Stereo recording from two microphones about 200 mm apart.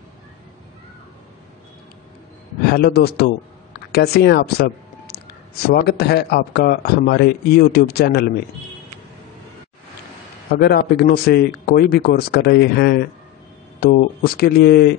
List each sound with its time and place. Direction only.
2.7 s speech: 50° left (ahead or behind)
10.6 s speech: 50° left (ahead or behind)